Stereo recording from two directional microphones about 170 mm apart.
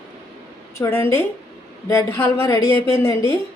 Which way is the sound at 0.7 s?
15° left (ahead or behind).